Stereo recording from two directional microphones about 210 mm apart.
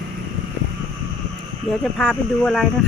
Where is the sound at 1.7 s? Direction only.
5° left (ahead or behind).